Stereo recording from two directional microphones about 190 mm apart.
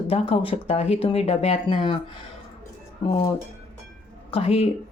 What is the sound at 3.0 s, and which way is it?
Speech, 25° left (ahead or behind).